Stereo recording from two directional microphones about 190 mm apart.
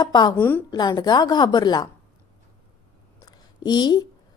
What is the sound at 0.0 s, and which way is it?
Speech, 20° left (ahead or behind).